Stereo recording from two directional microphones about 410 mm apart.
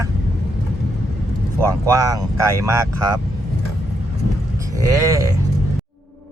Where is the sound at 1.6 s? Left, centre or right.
Centre.